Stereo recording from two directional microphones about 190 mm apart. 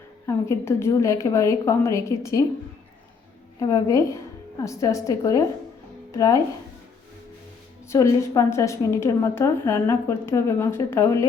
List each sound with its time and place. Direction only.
0.3 s a woman's voice: 15° left (ahead or behind)
3.6 s a woman's voice: 20° left (ahead or behind)
7.9 s a woman's voice: 15° left (ahead or behind)